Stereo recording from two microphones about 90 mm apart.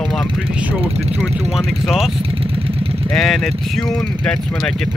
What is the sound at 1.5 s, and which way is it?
Speech, 5° right (ahead or behind).